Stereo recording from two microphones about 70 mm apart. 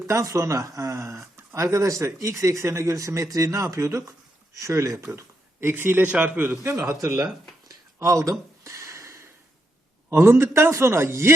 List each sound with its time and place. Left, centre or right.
0.1 s speech: right
5.1 s speech: right
6.6 s a man's voice: right
7.9 s a sound: right
10.1 s a man's voice: right